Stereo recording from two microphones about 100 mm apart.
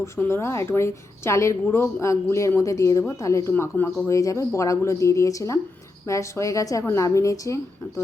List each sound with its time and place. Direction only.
0.0 s a woman's voice: 25° left (ahead or behind)
3.5 s a woman's voice: 20° left (ahead or behind)
4.1 s a woman's voice: 35° left (ahead or behind)